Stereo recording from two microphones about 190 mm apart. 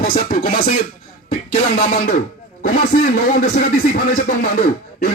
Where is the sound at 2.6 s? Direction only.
45° left (ahead or behind).